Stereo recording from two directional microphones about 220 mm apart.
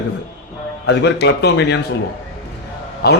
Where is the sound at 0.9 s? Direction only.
55° left (ahead or behind).